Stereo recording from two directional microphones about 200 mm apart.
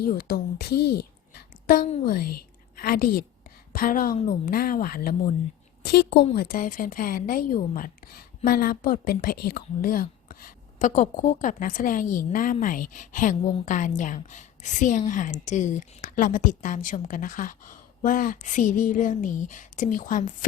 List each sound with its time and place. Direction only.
0.2 s a woman's voice: 50° left (ahead or behind)
1.6 s a woman's voice: 45° left (ahead or behind)